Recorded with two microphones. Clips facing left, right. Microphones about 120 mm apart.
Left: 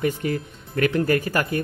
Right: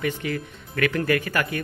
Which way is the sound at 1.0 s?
40° left (ahead or behind).